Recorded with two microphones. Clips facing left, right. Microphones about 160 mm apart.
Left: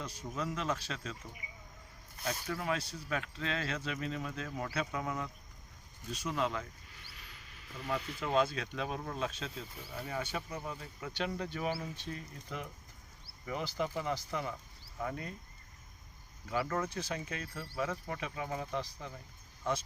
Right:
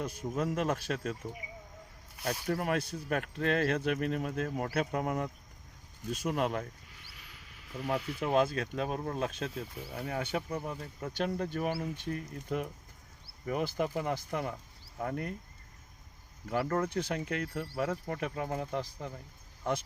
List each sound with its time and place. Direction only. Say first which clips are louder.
0.0 s a man's voice: right 6 dB; 55° right (ahead or behind)
2.5 s speech: right 6 dB; 55° right (ahead or behind)
7.9 s speech: right 4 dB; 60° right (ahead or behind)
16.5 s speech: right 4 dB; 55° right (ahead or behind)